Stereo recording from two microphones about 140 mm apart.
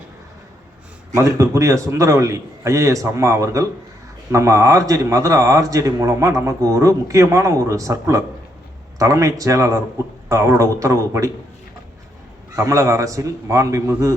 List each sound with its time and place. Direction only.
1.1 s a man's voice: 25° right (ahead or behind)
12.5 s a man's voice: 20° right (ahead or behind)